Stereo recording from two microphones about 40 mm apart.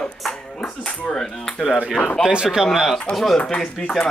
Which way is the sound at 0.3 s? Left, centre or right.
Left.